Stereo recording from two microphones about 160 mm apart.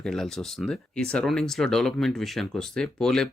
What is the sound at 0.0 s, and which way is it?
Speech, 5° left (ahead or behind).